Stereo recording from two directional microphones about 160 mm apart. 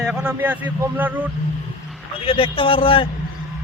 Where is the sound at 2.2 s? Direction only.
35° left (ahead or behind).